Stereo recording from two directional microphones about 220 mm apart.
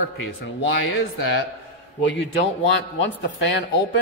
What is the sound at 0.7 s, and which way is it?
Speech, 55° left (ahead or behind).